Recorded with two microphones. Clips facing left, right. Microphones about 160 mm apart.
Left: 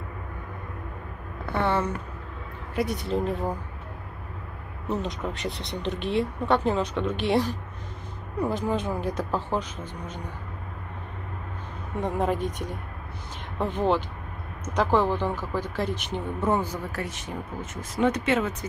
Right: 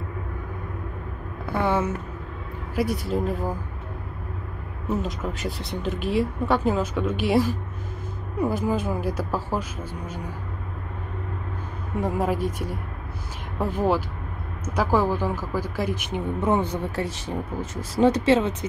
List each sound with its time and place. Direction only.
1.4 s a sound: 10° right (ahead or behind)
2.7 s speech: centre (ahead or behind)
4.8 s speech: centre (ahead or behind)
12.0 s speech: 5° right (ahead or behind); by 18.7 s 30° right (ahead or behind)